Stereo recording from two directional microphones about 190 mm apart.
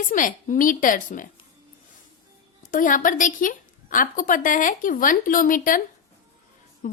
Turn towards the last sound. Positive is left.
turn(degrees=45)  # may be behind; listen again after turning